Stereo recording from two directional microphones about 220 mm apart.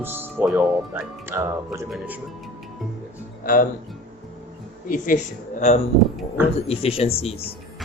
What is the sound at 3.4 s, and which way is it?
Speech, 40° left (ahead or behind).